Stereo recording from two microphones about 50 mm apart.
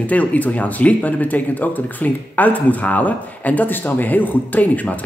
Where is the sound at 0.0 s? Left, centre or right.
Left.